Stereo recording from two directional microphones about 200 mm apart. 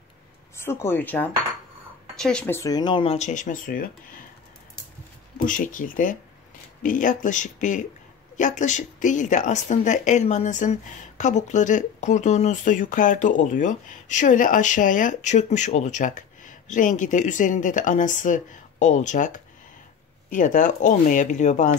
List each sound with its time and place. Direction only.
0.6 s speech: 10° left (ahead or behind); by 4.2 s 45° left (ahead or behind)
5.4 s speech: 40° left (ahead or behind)